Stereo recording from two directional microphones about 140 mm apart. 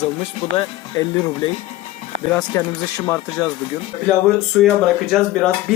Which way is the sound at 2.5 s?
20° left (ahead or behind).